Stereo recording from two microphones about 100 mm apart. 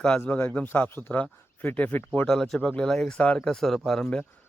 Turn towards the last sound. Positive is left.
turn(degrees=5)  # may be behind; listen again after turning